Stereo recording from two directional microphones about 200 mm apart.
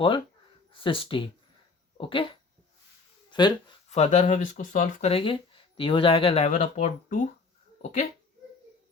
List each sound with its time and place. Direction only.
0.7 s speech: 25° left (ahead or behind)
3.8 s speech: 35° left (ahead or behind)